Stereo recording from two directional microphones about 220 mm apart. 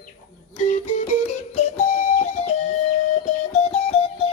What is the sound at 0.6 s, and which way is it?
Music, 30° left (ahead or behind).